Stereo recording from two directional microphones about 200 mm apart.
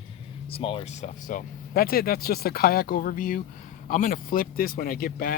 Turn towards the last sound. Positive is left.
turn(degrees=45)  # may be behind; listen again after turning